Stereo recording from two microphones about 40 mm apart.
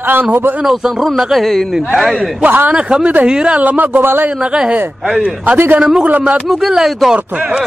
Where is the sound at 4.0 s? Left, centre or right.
Right.